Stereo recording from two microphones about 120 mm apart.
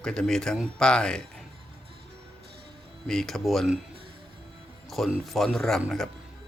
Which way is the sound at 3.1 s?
5° left (ahead or behind).